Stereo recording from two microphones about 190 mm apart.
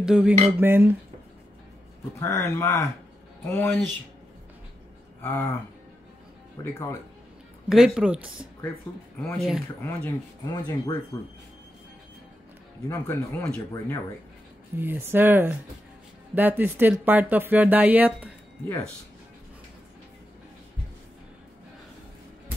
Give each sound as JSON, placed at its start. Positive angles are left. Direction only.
{"t": 0.0, "sound": "speech", "side_deg": -5}
{"t": 2.1, "sound": "speech", "side_deg": 15}
{"t": 5.2, "sound": "speech", "side_deg": 10}
{"t": 7.7, "sound": "speech", "side_deg": 0}
{"t": 9.8, "sound": "speech", "side_deg": 10}
{"t": 12.8, "sound": "speech", "side_deg": 15}
{"t": 13.4, "sound": "speech", "side_deg": 5}
{"t": 14.8, "sound": "speech", "side_deg": -10}